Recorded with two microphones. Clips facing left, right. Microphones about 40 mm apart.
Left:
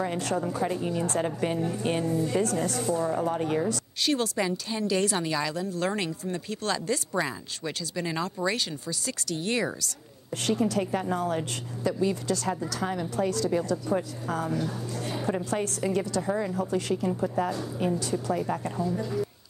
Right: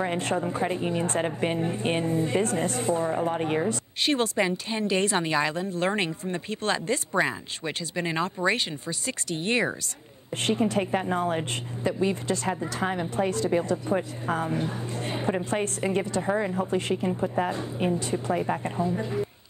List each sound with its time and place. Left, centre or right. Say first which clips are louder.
0.0 s a woman's voice: right 2 dB; right